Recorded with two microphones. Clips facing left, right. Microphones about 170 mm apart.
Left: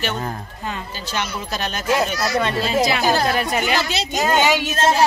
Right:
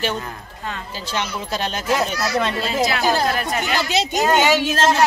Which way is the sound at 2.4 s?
Centre (ahead or behind).